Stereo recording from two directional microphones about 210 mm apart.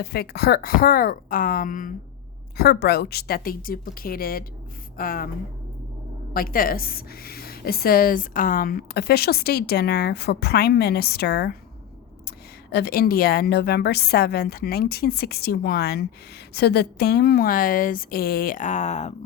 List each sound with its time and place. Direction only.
0.0 s speech: 50° left (ahead or behind)
6.3 s speech: 45° left (ahead or behind)
12.7 s speech: 45° left (ahead or behind)